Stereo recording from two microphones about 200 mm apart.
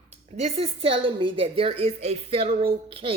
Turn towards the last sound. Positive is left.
turn(degrees=-25)  # may be behind; listen again after turning